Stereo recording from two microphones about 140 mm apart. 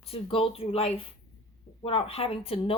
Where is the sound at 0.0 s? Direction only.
40° left (ahead or behind).